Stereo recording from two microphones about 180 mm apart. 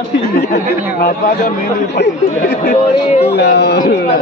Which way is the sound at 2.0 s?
70° left (ahead or behind).